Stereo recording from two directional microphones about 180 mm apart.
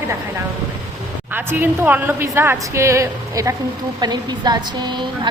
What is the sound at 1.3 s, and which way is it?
A woman's voice, 10° right (ahead or behind).